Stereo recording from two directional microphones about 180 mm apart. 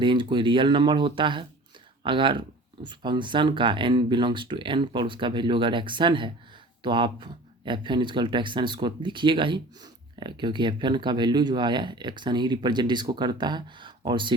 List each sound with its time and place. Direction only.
0.0 s speech: 25° right (ahead or behind)